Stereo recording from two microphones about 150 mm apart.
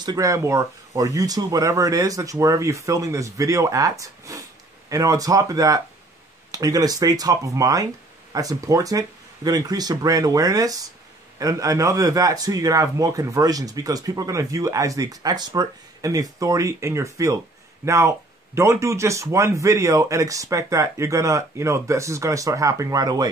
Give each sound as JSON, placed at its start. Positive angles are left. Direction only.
{"t": 0.0, "sound": "a man's voice", "side_deg": -25}